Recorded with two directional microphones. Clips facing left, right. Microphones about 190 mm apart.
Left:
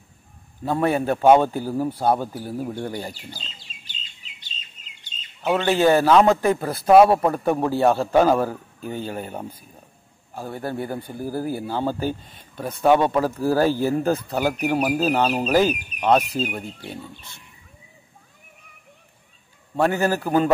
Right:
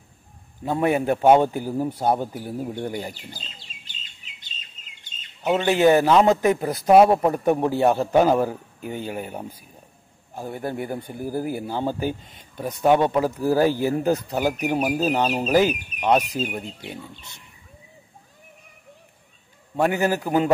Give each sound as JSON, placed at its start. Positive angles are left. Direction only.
{"t": 0.7, "sound": "speech", "side_deg": -15}
{"t": 5.5, "sound": "speech", "side_deg": -15}
{"t": 19.8, "sound": "speech", "side_deg": -15}